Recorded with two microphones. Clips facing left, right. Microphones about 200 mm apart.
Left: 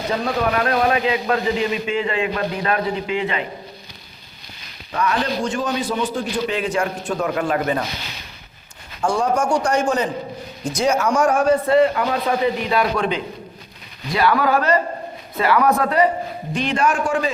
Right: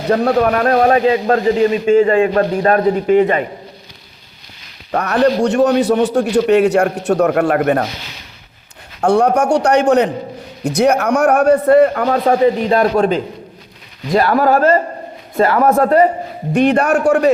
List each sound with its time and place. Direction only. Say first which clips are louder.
0.1 s a man's voice: right 9 dB; 55° right (ahead or behind)
4.9 s a man's voice: right 8 dB; 65° right (ahead or behind)
9.0 s a man's voice: right 7 dB; 65° right (ahead or behind)
11.6 s a man's voice: right 6 dB; 50° right (ahead or behind)
16.5 s a man's voice: right 8 dB; 60° right (ahead or behind)